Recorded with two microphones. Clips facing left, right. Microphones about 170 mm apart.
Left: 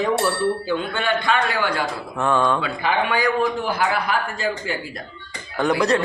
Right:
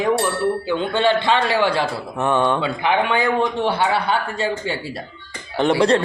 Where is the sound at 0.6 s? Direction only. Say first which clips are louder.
Right 5 dB; 25° right (ahead or behind).